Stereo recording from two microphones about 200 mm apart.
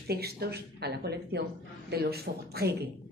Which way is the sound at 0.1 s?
50° right (ahead or behind).